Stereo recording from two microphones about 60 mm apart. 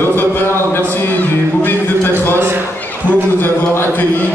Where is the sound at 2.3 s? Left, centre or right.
Right.